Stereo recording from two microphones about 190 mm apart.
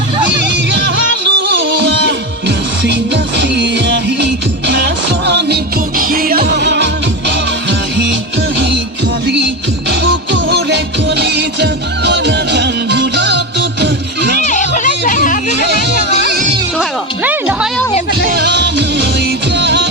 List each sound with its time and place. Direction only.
0.3 s music: 70° right (ahead or behind)
6.0 s music: 50° right (ahead or behind); by 8.0 s 70° right (ahead or behind)
9.9 s music: 70° right (ahead or behind)
14.4 s music: 40° left (ahead or behind)
15.6 s music: 65° right (ahead or behind)
17.2 s music: 10° right (ahead or behind)
18.3 s music: 60° right (ahead or behind)